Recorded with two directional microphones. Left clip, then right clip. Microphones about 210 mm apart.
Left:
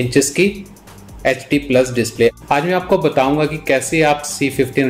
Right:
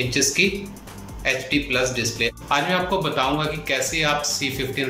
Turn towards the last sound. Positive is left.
turn(degrees=40)  # may be behind; listen again after turning